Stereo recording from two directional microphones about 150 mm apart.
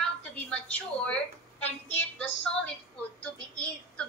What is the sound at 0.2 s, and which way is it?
A woman's voice, 10° left (ahead or behind).